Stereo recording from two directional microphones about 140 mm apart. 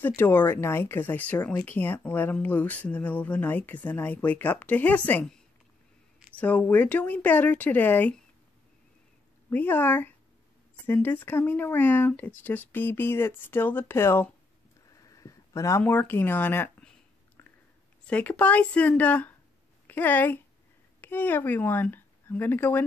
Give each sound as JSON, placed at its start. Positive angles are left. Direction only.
{"t": 0.0, "sound": "speech", "side_deg": 15}
{"t": 9.5, "sound": "speech", "side_deg": 15}
{"t": 15.0, "sound": "a sound", "side_deg": 25}
{"t": 15.8, "sound": "speech", "side_deg": 15}
{"t": 18.0, "sound": "speech", "side_deg": 10}